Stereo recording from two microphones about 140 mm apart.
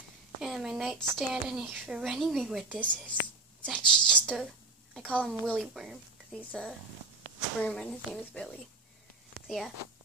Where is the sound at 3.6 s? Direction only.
5° left (ahead or behind).